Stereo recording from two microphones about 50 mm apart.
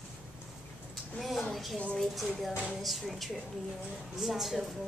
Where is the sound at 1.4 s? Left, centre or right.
Centre.